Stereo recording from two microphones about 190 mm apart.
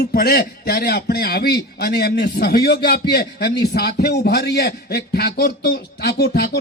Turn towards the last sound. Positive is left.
turn(degrees=60)  # may be behind; listen again after turning